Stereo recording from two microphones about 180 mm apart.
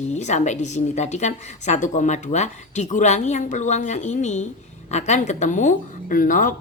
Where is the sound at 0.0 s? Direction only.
40° left (ahead or behind).